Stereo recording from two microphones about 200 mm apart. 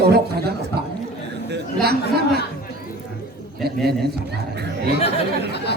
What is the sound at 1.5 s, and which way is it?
Chatter, 55° right (ahead or behind).